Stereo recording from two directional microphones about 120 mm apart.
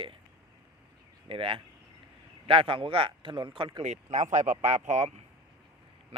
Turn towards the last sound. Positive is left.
turn(degrees=-75)  # may be behind; listen again after turning